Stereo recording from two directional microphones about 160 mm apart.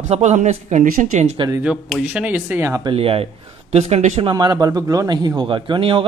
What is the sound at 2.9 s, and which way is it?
A man's voice, 35° right (ahead or behind).